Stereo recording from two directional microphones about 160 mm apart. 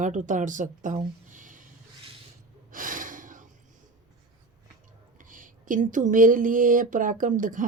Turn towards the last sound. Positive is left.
turn(degrees=-55)  # may be behind; listen again after turning